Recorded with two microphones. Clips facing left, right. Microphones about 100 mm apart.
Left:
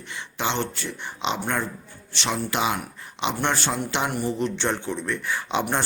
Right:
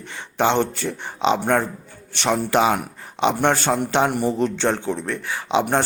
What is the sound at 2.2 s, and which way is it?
A man's voice, 50° right (ahead or behind).